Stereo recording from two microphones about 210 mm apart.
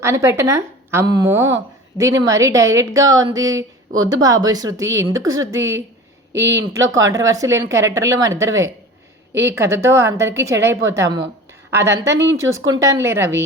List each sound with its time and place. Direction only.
0.0 s a woman's voice: 10° right (ahead or behind)
6.4 s speech: 60° right (ahead or behind)
6.9 s a woman's voice: 15° right (ahead or behind)
12.1 s speech: 55° right (ahead or behind)
12.4 s a woman's voice: 15° right (ahead or behind)